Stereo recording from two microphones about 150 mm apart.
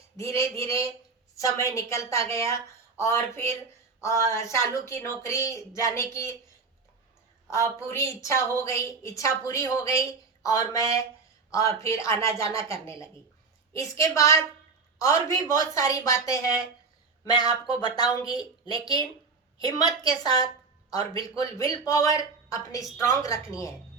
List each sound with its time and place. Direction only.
1.4 s a woman's voice: 20° left (ahead or behind)
7.5 s a woman's voice: 20° left (ahead or behind)